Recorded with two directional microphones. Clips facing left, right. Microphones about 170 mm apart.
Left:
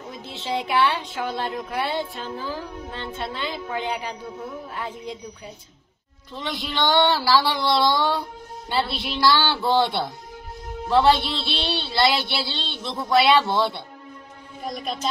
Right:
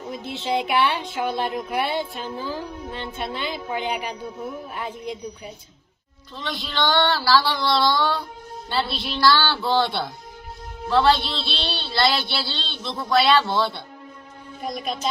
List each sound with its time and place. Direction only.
0.3 s speech: 20° right (ahead or behind)
6.3 s a man's voice: 10° left (ahead or behind)